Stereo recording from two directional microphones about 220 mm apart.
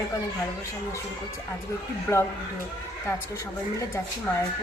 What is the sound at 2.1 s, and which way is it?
Speech, 10° left (ahead or behind).